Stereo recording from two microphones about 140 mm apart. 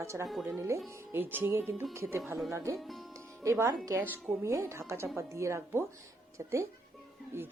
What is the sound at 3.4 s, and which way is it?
Speech, 20° right (ahead or behind).